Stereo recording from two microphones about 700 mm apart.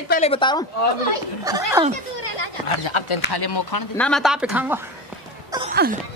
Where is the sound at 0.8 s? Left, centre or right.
Left.